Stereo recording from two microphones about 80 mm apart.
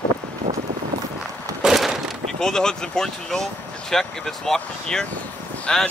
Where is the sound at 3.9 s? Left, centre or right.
Centre.